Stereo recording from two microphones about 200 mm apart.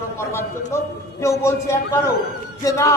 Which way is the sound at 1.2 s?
15° left (ahead or behind).